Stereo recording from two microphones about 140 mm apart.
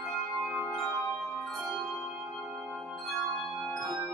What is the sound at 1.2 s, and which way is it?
Music, centre (ahead or behind).